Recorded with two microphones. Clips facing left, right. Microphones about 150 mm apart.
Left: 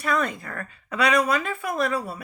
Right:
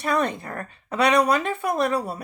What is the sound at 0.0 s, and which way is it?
Speech, 25° right (ahead or behind).